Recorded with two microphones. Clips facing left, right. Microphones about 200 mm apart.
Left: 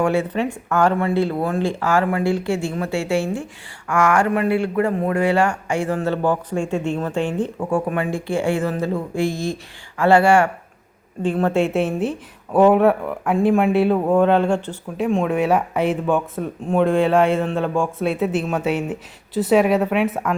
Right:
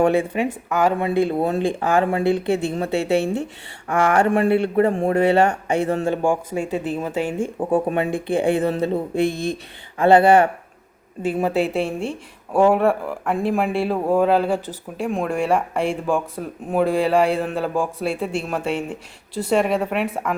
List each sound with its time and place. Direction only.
0.0 s speech: 15° right (ahead or behind)
0.7 s speech: 5° right (ahead or behind)
0.9 s speech: 15° right (ahead or behind)
3.8 s speech: 35° right (ahead or behind)
6.2 s speech: 10° right (ahead or behind)
7.7 s speech: 25° right (ahead or behind)
9.2 s speech: 60° right (ahead or behind)
10.0 s speech: 20° right (ahead or behind)
11.2 s speech: 10° right (ahead or behind)